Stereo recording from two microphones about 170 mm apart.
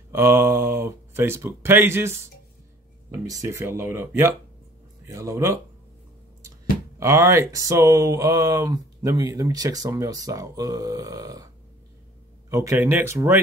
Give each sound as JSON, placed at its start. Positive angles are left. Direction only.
{"t": 0.1, "sound": "speech", "side_deg": -15}
{"t": 3.3, "sound": "speech", "side_deg": -20}
{"t": 7.0, "sound": "speech", "side_deg": -15}
{"t": 12.4, "sound": "speech", "side_deg": -15}